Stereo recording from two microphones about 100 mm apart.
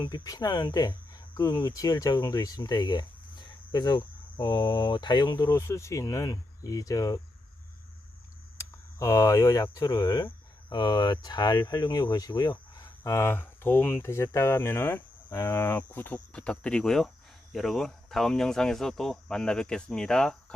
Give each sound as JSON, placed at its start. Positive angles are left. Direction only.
{"t": 0.0, "sound": "speech", "side_deg": 45}
{"t": 5.5, "sound": "speech", "side_deg": 30}
{"t": 8.5, "sound": "speech", "side_deg": 35}
{"t": 13.0, "sound": "speech", "side_deg": 25}